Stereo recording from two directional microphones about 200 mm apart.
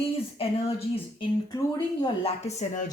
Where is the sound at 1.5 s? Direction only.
20° left (ahead or behind).